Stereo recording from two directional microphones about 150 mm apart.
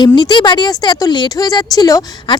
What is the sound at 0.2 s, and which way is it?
Speech, 30° left (ahead or behind).